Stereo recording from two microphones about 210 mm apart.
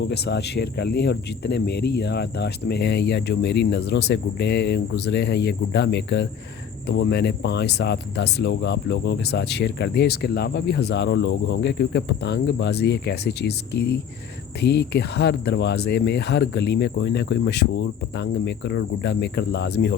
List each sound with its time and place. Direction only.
0.0 s speech: 55° left (ahead or behind)